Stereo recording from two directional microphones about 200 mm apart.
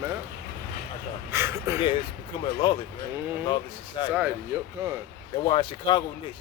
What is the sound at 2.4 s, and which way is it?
Speech, 25° left (ahead or behind).